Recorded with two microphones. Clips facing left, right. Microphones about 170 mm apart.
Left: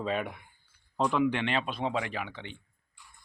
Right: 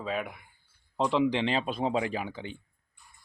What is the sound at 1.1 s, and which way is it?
Speech, 25° right (ahead or behind).